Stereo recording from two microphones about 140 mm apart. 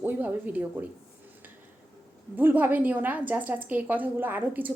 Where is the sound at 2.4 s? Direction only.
15° right (ahead or behind).